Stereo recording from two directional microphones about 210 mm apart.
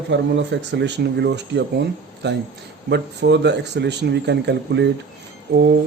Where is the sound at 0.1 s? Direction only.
60° right (ahead or behind).